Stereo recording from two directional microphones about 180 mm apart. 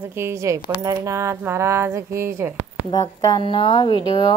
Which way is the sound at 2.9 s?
20° left (ahead or behind).